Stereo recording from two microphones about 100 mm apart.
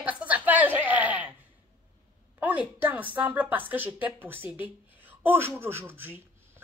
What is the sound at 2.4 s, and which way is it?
A woman's voice, 15° right (ahead or behind).